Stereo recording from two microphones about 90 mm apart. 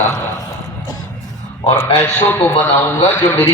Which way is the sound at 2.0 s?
25° left (ahead or behind).